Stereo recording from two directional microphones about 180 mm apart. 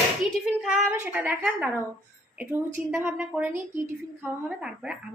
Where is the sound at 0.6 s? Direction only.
10° right (ahead or behind).